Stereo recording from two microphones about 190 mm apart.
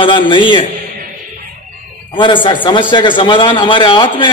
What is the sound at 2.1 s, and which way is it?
A man's voice, 25° left (ahead or behind).